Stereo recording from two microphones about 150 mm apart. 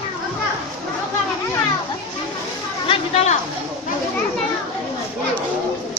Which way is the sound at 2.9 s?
45° left (ahead or behind).